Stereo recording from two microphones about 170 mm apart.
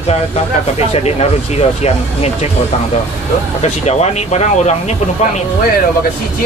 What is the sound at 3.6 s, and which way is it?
Speech, 40° left (ahead or behind).